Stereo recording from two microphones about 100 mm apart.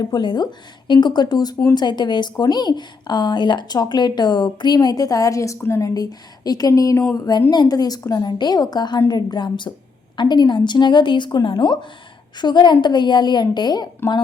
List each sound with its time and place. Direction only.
0.0 s a woman's voice: 45° left (ahead or behind)